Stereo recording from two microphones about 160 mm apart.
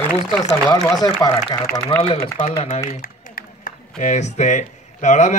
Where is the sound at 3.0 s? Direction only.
60° left (ahead or behind).